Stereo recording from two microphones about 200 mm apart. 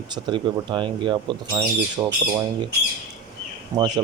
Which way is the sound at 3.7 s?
15° right (ahead or behind).